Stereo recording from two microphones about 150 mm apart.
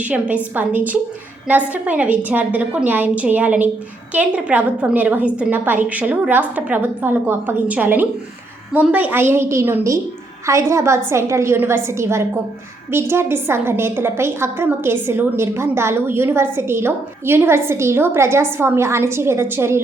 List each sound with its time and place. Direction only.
0.0 s a woman's voice: 10° right (ahead or behind)